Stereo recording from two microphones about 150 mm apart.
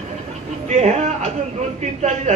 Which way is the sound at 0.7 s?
50° right (ahead or behind).